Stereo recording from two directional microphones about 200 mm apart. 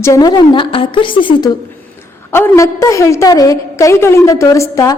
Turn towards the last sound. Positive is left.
turn(degrees=15)  # may be behind; listen again after turning